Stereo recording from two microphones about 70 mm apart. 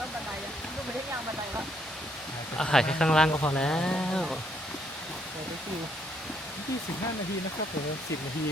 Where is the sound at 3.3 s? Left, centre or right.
Left.